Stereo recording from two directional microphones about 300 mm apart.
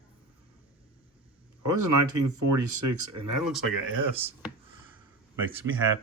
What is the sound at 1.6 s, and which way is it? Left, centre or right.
Speech, right.